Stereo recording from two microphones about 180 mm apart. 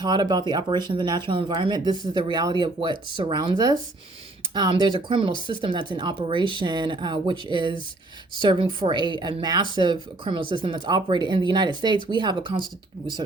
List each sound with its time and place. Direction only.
0.0 s speech: 25° right (ahead or behind)